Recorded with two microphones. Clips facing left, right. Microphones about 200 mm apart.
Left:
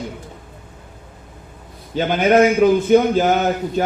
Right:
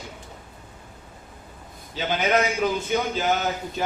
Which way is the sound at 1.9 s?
55° left (ahead or behind).